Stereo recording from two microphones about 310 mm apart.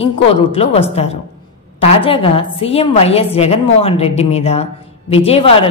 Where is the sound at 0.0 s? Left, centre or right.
Centre.